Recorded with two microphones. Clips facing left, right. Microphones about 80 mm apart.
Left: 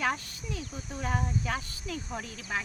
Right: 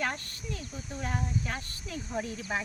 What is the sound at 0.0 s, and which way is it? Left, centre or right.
Speech, centre.